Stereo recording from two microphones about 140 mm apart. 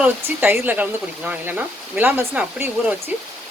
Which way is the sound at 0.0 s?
15° right (ahead or behind).